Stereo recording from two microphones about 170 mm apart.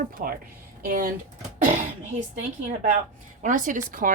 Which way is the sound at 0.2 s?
50° right (ahead or behind).